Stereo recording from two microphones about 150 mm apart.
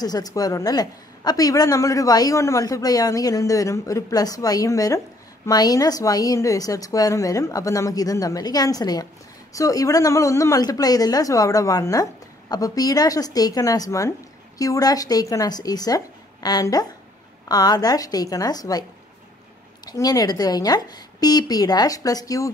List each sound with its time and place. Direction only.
0.0 s a woman's voice: 25° left (ahead or behind)
19.9 s a woman's voice: 25° left (ahead or behind)